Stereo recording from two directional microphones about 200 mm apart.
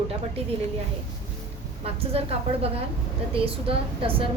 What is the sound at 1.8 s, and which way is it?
A woman's voice, 30° right (ahead or behind).